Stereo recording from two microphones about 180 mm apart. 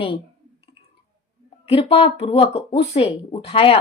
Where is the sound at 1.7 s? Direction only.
30° left (ahead or behind).